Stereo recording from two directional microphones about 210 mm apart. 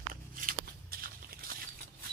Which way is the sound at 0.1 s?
40° right (ahead or behind).